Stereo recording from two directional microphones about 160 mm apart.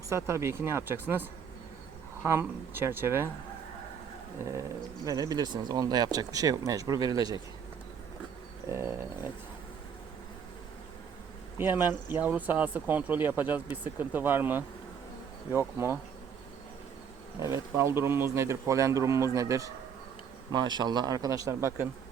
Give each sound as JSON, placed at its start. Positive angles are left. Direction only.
{"t": 0.1, "sound": "speech", "side_deg": -15}
{"t": 5.0, "sound": "speech", "side_deg": -20}
{"t": 11.5, "sound": "speech", "side_deg": -15}
{"t": 17.4, "sound": "speech", "side_deg": -15}